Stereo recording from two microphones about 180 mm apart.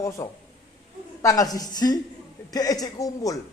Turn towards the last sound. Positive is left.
turn(degrees=20)  # may be behind; listen again after turning